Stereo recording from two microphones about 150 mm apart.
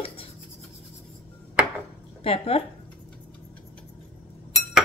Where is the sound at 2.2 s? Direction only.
40° left (ahead or behind).